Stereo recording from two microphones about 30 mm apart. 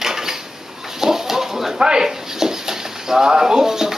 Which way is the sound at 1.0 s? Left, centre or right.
Centre.